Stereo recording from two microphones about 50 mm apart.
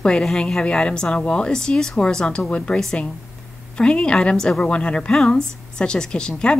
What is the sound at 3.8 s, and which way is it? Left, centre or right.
A woman's voice, centre.